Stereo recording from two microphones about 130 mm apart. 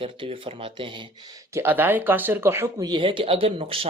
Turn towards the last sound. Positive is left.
turn(degrees=-45)  # may be behind; listen again after turning